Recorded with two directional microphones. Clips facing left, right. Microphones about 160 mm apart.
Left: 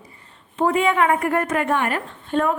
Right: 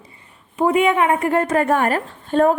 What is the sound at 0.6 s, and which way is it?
A woman's voice, 20° right (ahead or behind).